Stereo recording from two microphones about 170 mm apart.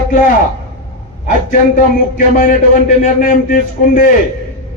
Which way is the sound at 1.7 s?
50° left (ahead or behind).